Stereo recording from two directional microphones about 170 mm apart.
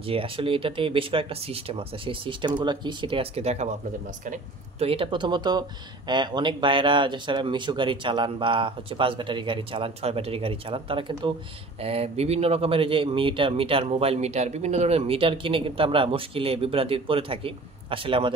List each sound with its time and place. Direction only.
0.0 s speech: 35° right (ahead or behind)